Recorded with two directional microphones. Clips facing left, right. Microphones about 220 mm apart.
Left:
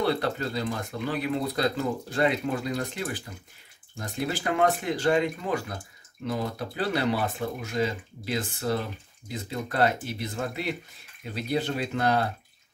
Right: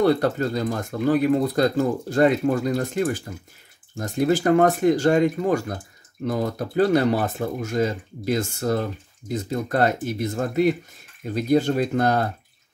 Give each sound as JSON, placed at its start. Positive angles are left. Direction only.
{"t": 0.0, "sound": "speech", "side_deg": -45}